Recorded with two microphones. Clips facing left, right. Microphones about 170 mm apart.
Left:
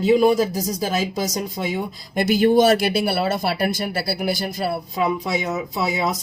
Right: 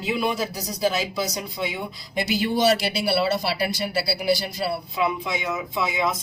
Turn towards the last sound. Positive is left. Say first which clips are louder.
# left 2 dB
turn(degrees=40)  # may be behind; listen again after turning